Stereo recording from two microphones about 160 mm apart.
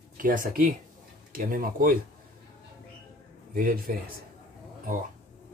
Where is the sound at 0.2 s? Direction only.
60° right (ahead or behind).